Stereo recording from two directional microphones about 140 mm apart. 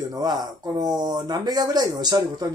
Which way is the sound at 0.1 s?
30° right (ahead or behind).